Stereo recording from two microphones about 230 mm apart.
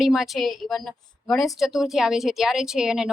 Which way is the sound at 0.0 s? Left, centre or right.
Centre.